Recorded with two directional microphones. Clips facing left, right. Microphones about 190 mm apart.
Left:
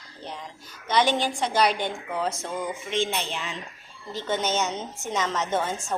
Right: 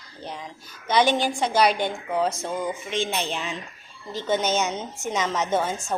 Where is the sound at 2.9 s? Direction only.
15° right (ahead or behind).